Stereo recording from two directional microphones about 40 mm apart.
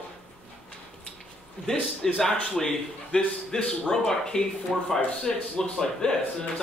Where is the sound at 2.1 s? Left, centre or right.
Centre.